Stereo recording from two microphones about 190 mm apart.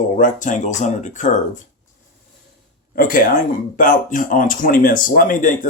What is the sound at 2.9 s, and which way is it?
Speech, 45° left (ahead or behind).